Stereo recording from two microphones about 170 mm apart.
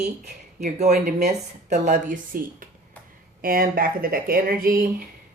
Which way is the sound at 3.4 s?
55° right (ahead or behind).